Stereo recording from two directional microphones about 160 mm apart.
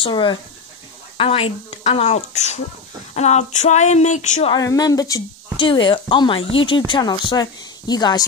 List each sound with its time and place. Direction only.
0.0 s speech: 30° left (ahead or behind); by 4.5 s 50° left (ahead or behind)
4.6 s speech: 25° left (ahead or behind)